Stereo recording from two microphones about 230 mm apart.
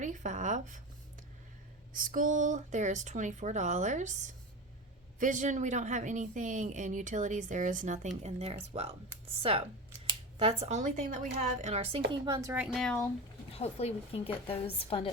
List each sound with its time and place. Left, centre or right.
0.0 s a woman's voice: right
1.9 s a woman's voice: right
5.2 s a woman's voice: right
12.2 s speech: centre
13.5 s a woman's voice: left